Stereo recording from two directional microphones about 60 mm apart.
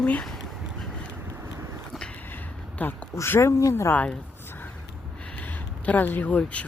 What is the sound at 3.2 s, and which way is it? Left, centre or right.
Speech, left.